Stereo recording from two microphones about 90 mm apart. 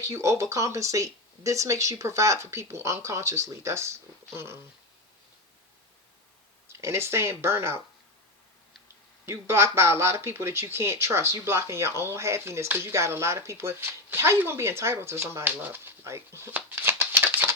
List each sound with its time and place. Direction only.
0.0 s speech: 35° right (ahead or behind)
6.7 s speech: 30° right (ahead or behind)
9.2 s speech: 30° right (ahead or behind)